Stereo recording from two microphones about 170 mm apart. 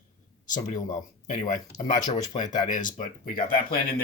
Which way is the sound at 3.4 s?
60° left (ahead or behind).